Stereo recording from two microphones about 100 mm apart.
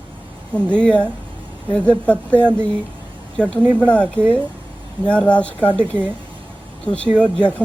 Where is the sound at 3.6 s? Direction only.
20° right (ahead or behind).